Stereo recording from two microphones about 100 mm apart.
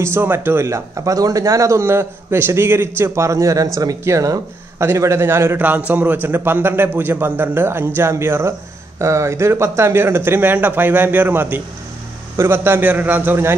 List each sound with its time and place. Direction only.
0.0 s speech: 20° right (ahead or behind)